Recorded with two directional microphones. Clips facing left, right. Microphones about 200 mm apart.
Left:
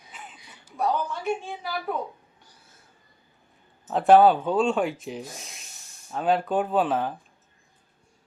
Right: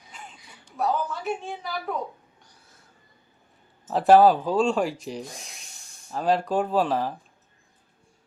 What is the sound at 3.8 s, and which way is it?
Speech, centre (ahead or behind).